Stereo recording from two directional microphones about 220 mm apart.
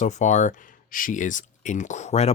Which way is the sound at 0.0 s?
35° left (ahead or behind).